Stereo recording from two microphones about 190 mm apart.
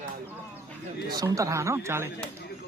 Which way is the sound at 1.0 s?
20° right (ahead or behind).